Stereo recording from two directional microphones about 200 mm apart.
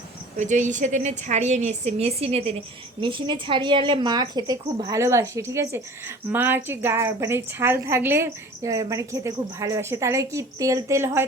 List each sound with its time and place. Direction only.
0.3 s a woman's voice: 35° right (ahead or behind); by 11.3 s 10° right (ahead or behind)